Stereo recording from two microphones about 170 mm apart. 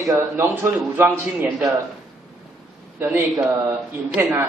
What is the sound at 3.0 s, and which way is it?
A man's voice, 10° right (ahead or behind).